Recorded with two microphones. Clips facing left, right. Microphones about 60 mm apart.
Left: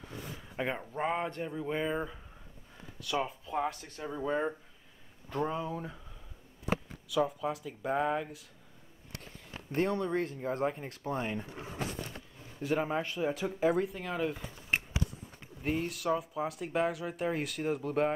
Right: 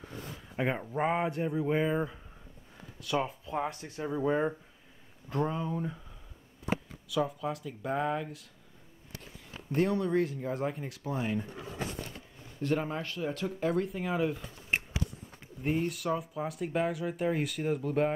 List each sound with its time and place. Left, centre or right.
0.6 s speech: centre
7.1 s speech: centre
9.8 s speech: left
10.6 s speech: centre
10.9 s speech: left
12.5 s speech: centre
13.9 s speech: centre
15.6 s speech: centre